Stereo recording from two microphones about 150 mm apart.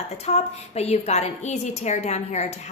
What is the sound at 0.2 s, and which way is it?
A woman's voice, 45° left (ahead or behind).